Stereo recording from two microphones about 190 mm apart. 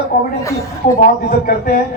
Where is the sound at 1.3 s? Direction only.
50° left (ahead or behind).